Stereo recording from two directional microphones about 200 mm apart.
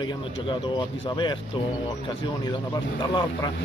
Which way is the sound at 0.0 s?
25° left (ahead or behind).